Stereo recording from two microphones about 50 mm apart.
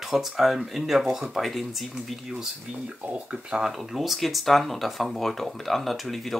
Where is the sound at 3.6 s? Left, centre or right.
Centre.